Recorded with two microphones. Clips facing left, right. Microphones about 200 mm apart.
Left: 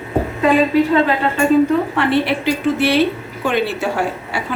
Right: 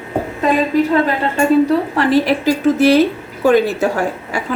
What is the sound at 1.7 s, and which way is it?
Speech, 40° right (ahead or behind).